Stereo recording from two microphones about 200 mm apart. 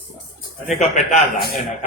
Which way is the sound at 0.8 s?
40° left (ahead or behind).